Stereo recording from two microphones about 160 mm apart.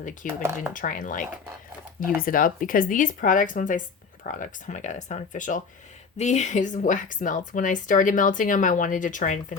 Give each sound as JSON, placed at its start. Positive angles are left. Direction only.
{"t": 0.0, "sound": "a woman's voice", "side_deg": 55}